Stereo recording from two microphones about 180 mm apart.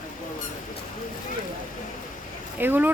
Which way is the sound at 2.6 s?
10° right (ahead or behind).